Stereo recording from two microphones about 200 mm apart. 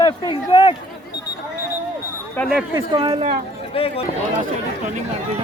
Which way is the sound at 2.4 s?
Centre (ahead or behind).